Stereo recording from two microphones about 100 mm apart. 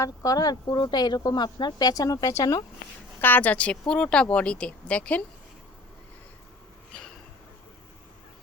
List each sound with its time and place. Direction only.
0.0 s speech: 35° left (ahead or behind)
3.2 s speech: 20° left (ahead or behind)